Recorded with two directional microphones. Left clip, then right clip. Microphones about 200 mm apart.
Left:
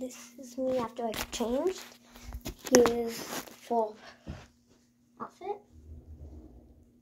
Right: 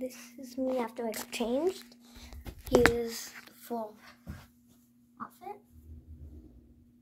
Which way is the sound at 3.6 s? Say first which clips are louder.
Left 8 dB; 35° right (ahead or behind).